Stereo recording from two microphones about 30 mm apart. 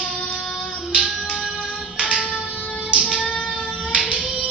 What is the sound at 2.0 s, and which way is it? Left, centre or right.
Music, right.